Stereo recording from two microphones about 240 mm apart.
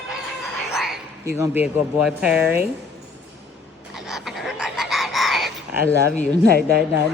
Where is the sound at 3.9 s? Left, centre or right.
Centre.